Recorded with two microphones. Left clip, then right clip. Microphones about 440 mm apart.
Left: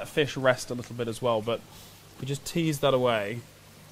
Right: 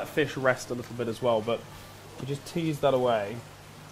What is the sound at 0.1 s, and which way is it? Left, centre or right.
Speech, left.